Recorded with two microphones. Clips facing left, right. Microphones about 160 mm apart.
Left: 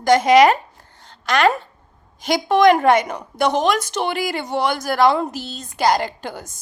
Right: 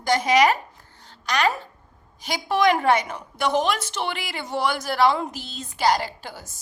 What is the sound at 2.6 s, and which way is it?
Speech, 50° left (ahead or behind).